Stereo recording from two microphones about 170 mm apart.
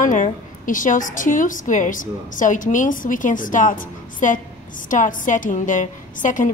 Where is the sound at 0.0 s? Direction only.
50° left (ahead or behind).